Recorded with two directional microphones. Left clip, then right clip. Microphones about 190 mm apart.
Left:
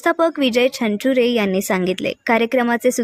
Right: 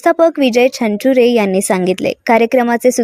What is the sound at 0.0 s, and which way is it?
A woman's voice, 15° right (ahead or behind).